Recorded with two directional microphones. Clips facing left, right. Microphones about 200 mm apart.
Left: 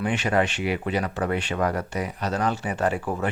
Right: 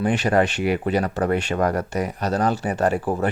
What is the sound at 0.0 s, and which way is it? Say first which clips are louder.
Speech: right 4 dB; 35° right (ahead or behind).